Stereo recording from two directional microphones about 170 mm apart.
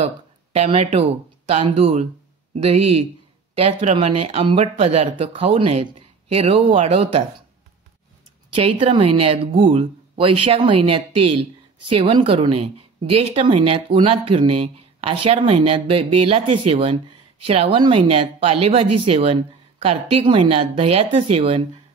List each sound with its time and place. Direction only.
0.0 s speech: 35° right (ahead or behind)
8.5 s speech: 30° right (ahead or behind)